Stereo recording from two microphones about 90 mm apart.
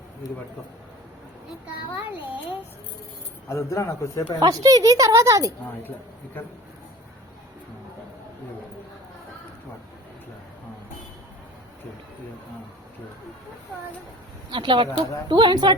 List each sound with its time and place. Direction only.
2.1 s a child's voice: 20° right (ahead or behind)
3.5 s a man's voice: 35° left (ahead or behind)
4.4 s speech: 45° right (ahead or behind)
14.5 s speech: 65° right (ahead or behind)